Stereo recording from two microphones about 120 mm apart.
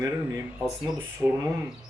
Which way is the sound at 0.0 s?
20° right (ahead or behind).